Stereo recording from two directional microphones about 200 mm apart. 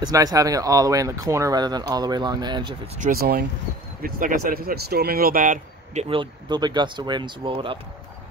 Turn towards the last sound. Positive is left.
turn(degrees=-25)  # may be behind; listen again after turning